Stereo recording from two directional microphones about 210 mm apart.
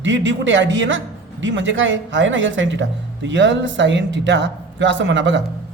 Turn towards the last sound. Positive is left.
turn(degrees=-60)  # may be behind; listen again after turning